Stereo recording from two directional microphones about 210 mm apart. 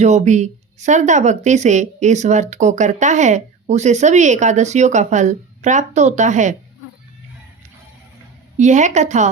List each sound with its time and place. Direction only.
0.0 s speech: 35° right (ahead or behind)
8.5 s speech: 35° right (ahead or behind)